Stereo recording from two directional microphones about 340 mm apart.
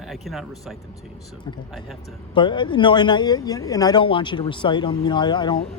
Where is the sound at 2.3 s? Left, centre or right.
Centre.